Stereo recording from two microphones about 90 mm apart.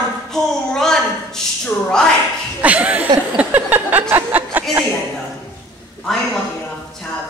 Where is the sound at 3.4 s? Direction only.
20° right (ahead or behind).